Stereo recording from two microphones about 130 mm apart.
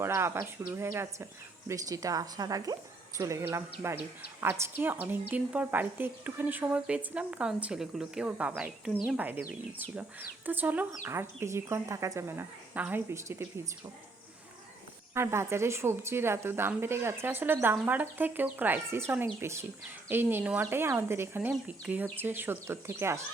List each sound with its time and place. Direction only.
0.0 s a woman's voice: 20° right (ahead or behind)
15.1 s a woman's voice: 20° right (ahead or behind)